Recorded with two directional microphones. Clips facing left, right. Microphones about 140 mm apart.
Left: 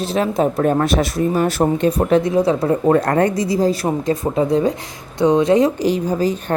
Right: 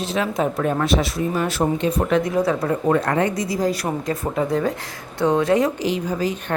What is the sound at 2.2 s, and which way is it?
Speech, 25° left (ahead or behind).